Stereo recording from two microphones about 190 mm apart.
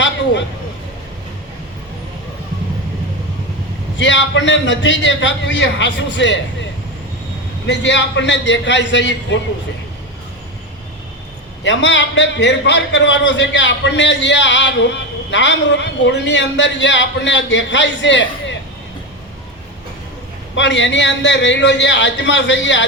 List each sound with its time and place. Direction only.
3.9 s a man's voice: 70° left (ahead or behind)
7.7 s a man's voice: 70° left (ahead or behind)
11.6 s a man's voice: 70° left (ahead or behind)
20.6 s a man's voice: 70° left (ahead or behind)